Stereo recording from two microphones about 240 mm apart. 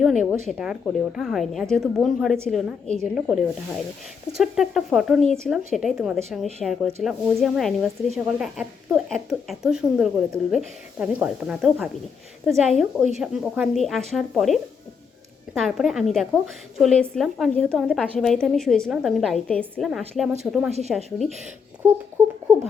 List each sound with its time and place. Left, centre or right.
0.0 s speech: centre
20.7 s a woman's voice: right
20.9 s speech: centre